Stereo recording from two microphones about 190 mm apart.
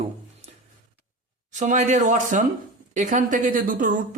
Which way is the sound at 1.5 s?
40° right (ahead or behind).